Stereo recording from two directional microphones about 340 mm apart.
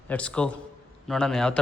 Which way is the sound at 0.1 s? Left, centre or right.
Centre.